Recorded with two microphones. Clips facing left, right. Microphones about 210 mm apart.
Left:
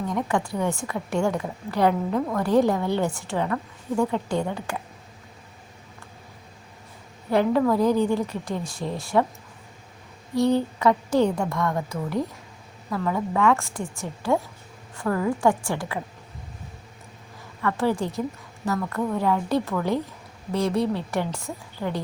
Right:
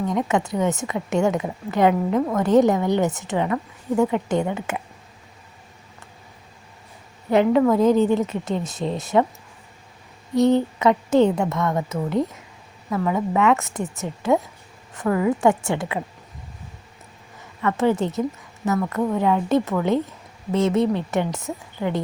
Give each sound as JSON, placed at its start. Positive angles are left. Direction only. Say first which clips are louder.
{"t": 0.1, "sound": "a woman's voice", "louder": "right 3 dB", "side_deg": -20}
{"t": 7.3, "sound": "a woman's voice", "louder": "right 4 dB", "side_deg": -20}
{"t": 10.3, "sound": "a woman's voice", "louder": "right 4 dB", "side_deg": -20}
{"t": 14.9, "sound": "a woman's voice", "louder": "right 4 dB", "side_deg": -10}
{"t": 15.4, "sound": "a woman's voice", "louder": "right 3 dB", "side_deg": -25}
{"t": 17.6, "sound": "a woman's voice", "louder": "right 4 dB", "side_deg": -20}